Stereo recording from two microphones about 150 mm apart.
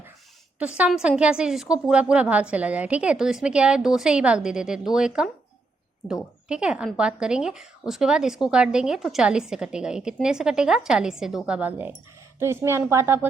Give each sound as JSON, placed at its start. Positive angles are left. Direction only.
{"t": 0.6, "sound": "a woman's voice", "side_deg": -10}
{"t": 6.5, "sound": "a woman's voice", "side_deg": -5}